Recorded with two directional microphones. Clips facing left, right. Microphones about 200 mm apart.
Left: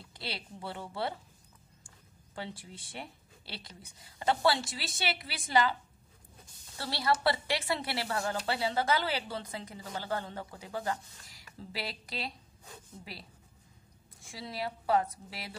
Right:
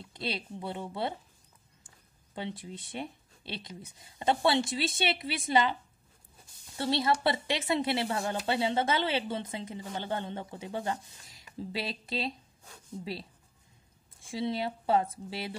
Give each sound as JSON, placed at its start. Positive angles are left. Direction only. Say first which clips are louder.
{"t": 0.0, "sound": "a woman's voice", "louder": "right 6 dB", "side_deg": -20}
{"t": 2.3, "sound": "a woman's voice", "louder": "right 4 dB", "side_deg": -20}
{"t": 6.8, "sound": "a woman's voice", "louder": "right 3 dB", "side_deg": -25}
{"t": 14.3, "sound": "a woman's voice", "louder": "right 7 dB", "side_deg": -25}